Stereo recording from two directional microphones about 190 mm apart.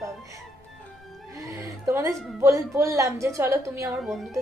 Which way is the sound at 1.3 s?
15° right (ahead or behind).